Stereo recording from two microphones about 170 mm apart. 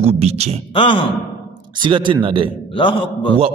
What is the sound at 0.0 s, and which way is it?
Speech, 40° right (ahead or behind).